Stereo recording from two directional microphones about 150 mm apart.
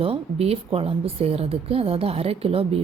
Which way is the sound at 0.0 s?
40° right (ahead or behind).